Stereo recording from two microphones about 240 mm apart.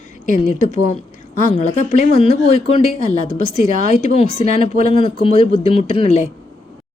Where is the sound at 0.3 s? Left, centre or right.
Left.